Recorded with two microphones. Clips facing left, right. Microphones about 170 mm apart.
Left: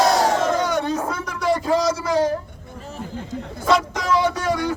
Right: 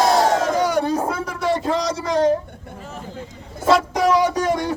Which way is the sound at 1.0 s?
30° right (ahead or behind).